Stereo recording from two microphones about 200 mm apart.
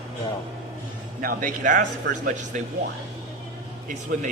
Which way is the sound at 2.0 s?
60° right (ahead or behind).